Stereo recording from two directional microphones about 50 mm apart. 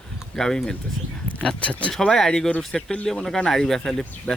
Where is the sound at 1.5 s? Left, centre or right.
Left.